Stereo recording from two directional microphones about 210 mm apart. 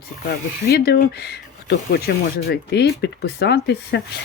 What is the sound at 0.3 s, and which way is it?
Speech, 45° left (ahead or behind).